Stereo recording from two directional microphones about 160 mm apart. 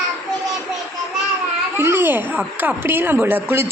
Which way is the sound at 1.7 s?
15° right (ahead or behind).